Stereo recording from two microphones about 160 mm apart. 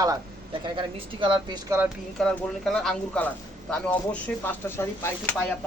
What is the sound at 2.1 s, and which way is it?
Speech, centre (ahead or behind).